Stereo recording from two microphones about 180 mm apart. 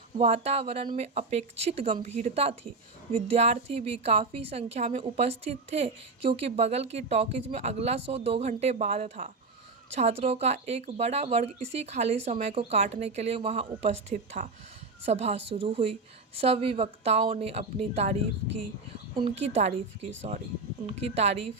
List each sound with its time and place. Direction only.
0.2 s a woman's voice: 35° right (ahead or behind)